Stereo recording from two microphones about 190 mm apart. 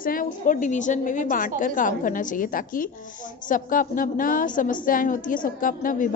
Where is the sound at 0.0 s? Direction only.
45° left (ahead or behind).